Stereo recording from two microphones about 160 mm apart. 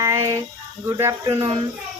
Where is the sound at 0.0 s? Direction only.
20° right (ahead or behind).